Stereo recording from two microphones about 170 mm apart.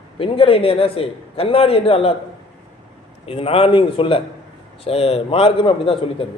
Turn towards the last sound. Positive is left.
turn(degrees=30)  # may be behind; listen again after turning